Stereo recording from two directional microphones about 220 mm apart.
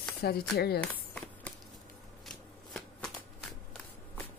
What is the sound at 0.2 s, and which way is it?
Speech, 45° left (ahead or behind).